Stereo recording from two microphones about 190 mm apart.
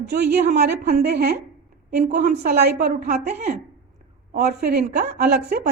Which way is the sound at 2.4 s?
55° right (ahead or behind).